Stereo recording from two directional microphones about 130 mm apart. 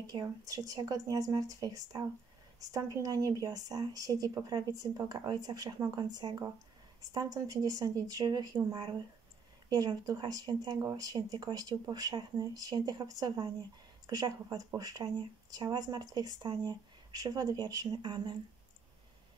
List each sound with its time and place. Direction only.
0.0 s a woman's voice: 30° right (ahead or behind)